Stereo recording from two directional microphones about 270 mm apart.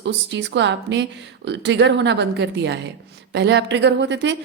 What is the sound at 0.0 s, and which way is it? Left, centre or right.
Speech, right.